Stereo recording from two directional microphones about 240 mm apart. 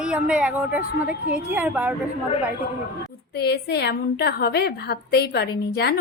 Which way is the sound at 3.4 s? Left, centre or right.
Left.